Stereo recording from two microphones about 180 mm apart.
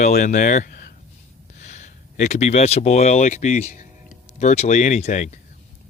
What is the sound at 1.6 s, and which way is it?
Speech, 40° left (ahead or behind).